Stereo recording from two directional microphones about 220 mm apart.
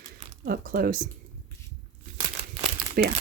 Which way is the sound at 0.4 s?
40° right (ahead or behind).